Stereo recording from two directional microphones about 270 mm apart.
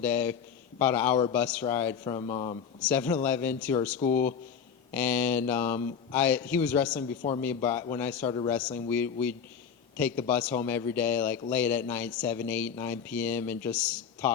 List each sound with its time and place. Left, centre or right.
0.0 s speech: centre
2.1 s a man's voice: left
2.8 s speech: centre
7.2 s a man's voice: left
7.4 s speech: centre
10.2 s speech: centre